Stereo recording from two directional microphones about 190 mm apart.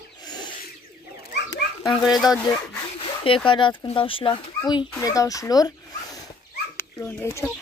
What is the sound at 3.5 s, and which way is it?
Speech, 25° left (ahead or behind).